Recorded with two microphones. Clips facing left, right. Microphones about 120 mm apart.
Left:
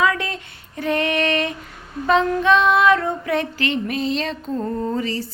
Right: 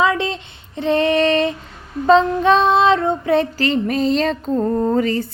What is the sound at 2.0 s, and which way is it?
Female singing, 30° right (ahead or behind).